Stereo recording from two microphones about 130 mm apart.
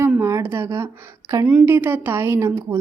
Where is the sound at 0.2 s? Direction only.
20° right (ahead or behind).